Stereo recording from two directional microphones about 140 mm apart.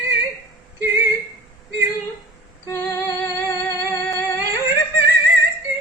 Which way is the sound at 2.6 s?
25° left (ahead or behind).